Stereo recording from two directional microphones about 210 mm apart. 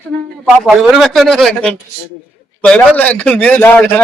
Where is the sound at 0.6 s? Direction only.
Centre (ahead or behind).